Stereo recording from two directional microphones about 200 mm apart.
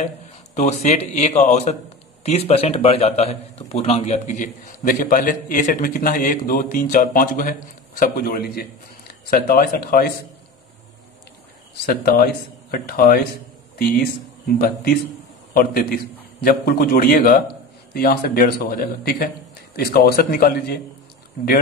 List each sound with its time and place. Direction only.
0.8 s a man's voice: 35° left (ahead or behind)
11.7 s a man's voice: 50° left (ahead or behind)